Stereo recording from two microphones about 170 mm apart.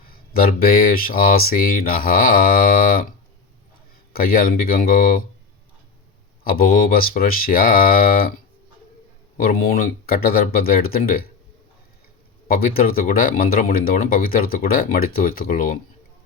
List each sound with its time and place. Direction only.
0.1 s speech: 60° left (ahead or behind)
4.1 s speech: 60° left (ahead or behind)
6.4 s speech: 60° left (ahead or behind)
9.4 s speech: 60° left (ahead or behind)
12.5 s speech: 60° left (ahead or behind)